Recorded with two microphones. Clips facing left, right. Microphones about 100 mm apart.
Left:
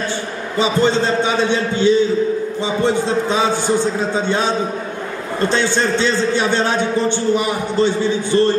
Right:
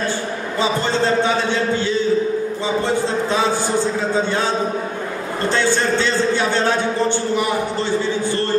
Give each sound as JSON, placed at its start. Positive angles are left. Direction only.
{"t": 0.6, "sound": "a man's voice", "side_deg": 20}
{"t": 5.5, "sound": "a man's voice", "side_deg": 20}